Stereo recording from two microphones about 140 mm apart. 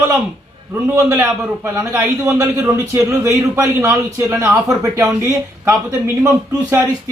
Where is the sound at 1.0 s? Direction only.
15° right (ahead or behind).